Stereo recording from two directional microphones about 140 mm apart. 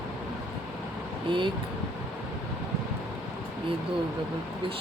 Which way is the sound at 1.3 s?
35° right (ahead or behind).